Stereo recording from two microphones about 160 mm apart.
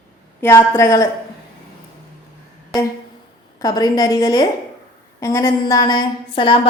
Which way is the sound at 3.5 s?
25° left (ahead or behind).